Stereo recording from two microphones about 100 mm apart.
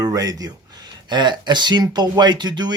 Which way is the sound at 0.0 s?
40° right (ahead or behind).